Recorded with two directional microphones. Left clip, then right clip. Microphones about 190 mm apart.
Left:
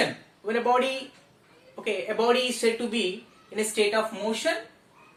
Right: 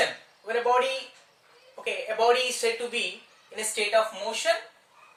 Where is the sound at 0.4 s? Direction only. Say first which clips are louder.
Even; 15° right (ahead or behind).